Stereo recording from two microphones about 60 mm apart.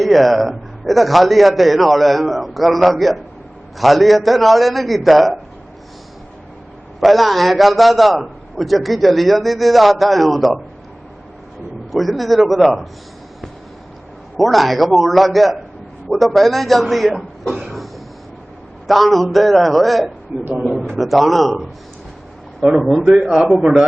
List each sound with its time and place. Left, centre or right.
0.0 s a man's voice: centre
7.0 s a man's voice: centre
11.9 s a man's voice: centre
14.3 s a man's voice: centre
17.2 s cough: centre
18.9 s a man's voice: centre